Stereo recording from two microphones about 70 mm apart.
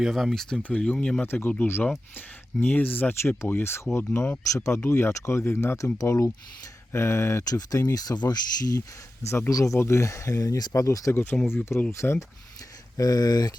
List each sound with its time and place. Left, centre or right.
0.0 s speech: centre
0.6 s speech: centre
1.3 s speech: left
3.2 s speech: left
4.5 s speech: left
4.8 s speech: left
5.7 s speech: left
7.4 s speech: left
9.5 s speech: left
11.1 s speech: left
13.0 s speech: left